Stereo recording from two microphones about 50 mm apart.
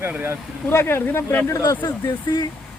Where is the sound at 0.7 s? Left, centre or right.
Left.